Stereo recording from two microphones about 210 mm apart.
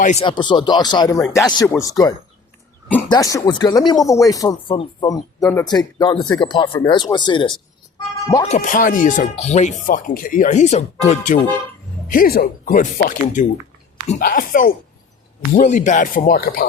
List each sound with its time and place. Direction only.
0.0 s speech: 35° left (ahead or behind)
0.3 s speech: 20° left (ahead or behind)
8.4 s speech: 35° left (ahead or behind)
12.1 s speech: 45° left (ahead or behind)